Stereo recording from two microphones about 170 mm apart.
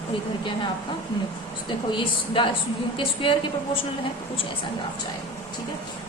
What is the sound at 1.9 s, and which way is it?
Speech, 30° left (ahead or behind).